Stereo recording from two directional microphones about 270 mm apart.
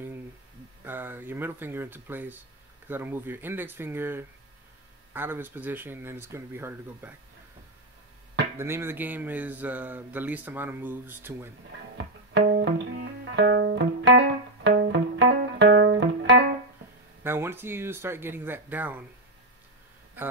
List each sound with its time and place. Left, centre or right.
0.8 s speech: centre
8.5 s speech: centre
12.4 s music: right
17.2 s speech: centre